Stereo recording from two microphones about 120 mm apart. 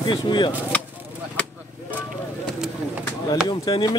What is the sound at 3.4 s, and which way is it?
Speech, 35° left (ahead or behind).